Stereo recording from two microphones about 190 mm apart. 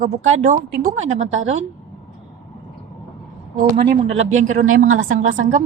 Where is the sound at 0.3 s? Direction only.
40° right (ahead or behind).